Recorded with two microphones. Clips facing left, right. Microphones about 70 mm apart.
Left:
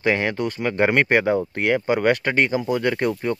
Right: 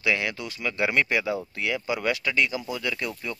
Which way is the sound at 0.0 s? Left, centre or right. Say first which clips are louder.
Left 6 dB; left.